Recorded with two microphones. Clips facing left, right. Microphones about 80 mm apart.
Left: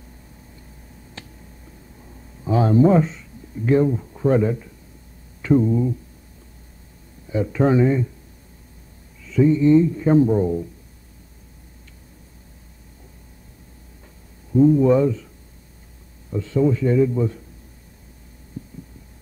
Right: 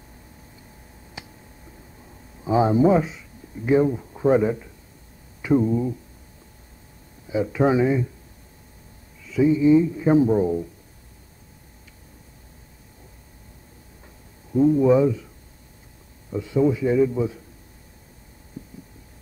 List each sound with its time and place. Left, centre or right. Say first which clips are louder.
1.2 s a sound: right 1 dB; centre
2.5 s a man's voice: left 1 dB; centre
7.2 s a man's voice: left 1 dB; centre
9.2 s a man's voice: left 2 dB; centre
14.5 s speech: left 2 dB; centre
16.3 s a man's voice: left 1 dB; centre
18.6 s heart sounds: left 3 dB; right